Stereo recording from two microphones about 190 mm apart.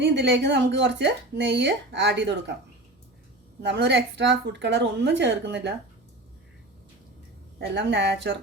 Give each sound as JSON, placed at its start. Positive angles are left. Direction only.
{"t": 0.0, "sound": "speech", "side_deg": -65}
{"t": 3.6, "sound": "speech", "side_deg": -65}
{"t": 7.6, "sound": "speech", "side_deg": -65}